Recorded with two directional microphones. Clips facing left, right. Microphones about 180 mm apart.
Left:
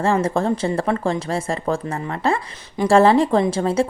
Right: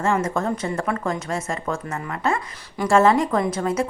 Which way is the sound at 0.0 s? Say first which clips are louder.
Left 3 dB; 30° left (ahead or behind).